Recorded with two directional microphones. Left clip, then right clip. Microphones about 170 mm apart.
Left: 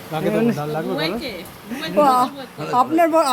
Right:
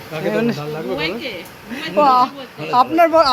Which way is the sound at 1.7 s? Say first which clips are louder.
Right 2 dB; 20° left (ahead or behind).